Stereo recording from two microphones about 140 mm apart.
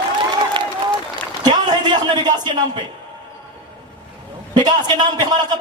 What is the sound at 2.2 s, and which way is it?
Speech, 30° right (ahead or behind).